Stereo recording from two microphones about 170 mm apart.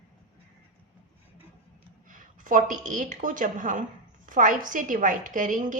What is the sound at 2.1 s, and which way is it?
A woman's voice, 50° right (ahead or behind).